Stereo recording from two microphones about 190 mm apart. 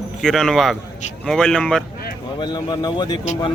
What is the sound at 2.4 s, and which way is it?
Speech, 25° left (ahead or behind).